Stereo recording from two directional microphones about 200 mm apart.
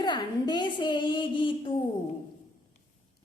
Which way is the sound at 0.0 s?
20° left (ahead or behind).